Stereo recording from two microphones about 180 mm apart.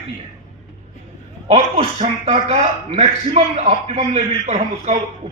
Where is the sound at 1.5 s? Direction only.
35° right (ahead or behind).